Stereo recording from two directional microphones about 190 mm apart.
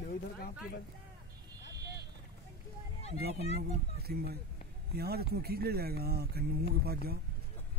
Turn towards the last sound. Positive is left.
turn(degrees=-55)  # may be behind; listen again after turning